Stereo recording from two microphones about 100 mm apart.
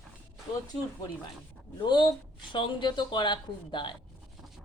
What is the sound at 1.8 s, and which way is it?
A man's voice, 50° left (ahead or behind).